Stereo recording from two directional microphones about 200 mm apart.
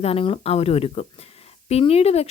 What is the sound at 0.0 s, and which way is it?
Speech, 30° left (ahead or behind).